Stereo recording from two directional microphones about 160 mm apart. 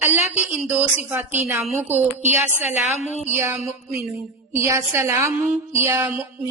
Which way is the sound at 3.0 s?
45° left (ahead or behind).